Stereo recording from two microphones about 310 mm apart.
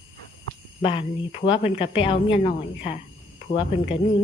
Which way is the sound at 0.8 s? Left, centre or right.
Centre.